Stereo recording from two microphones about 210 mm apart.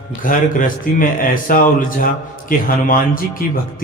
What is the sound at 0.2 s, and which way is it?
Speech, 40° left (ahead or behind).